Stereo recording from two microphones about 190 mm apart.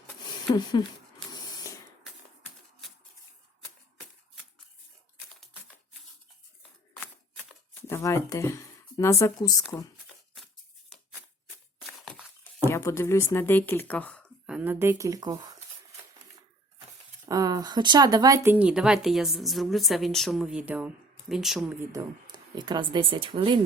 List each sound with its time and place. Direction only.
0.5 s speech: 20° left (ahead or behind)
1.3 s spray: 20° left (ahead or behind)
7.7 s speech: 10° left (ahead or behind)
10.3 s a sound: centre (ahead or behind)
11.9 s a sound: centre (ahead or behind)
12.6 s speech: 15° left (ahead or behind); by 15.4 s 20° right (ahead or behind)
17.2 s speech: 20° right (ahead or behind)
18.4 s a woman's voice: 10° right (ahead or behind)
21.9 s speech: 25° right (ahead or behind)